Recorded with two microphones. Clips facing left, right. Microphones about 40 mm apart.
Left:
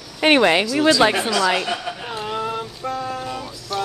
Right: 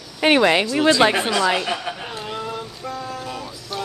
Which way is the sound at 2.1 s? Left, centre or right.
Centre.